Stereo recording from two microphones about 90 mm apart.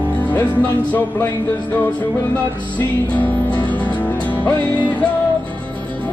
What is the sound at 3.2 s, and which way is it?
Music, 15° left (ahead or behind).